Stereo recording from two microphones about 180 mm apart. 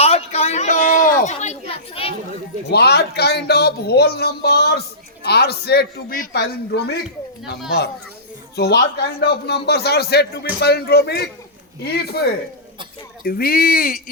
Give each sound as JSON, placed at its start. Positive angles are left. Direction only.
{"t": 0.0, "sound": "a sound", "side_deg": 35}
{"t": 2.6, "sound": "speech", "side_deg": 65}
{"t": 8.5, "sound": "speech", "side_deg": 65}
{"t": 13.2, "sound": "speech", "side_deg": 55}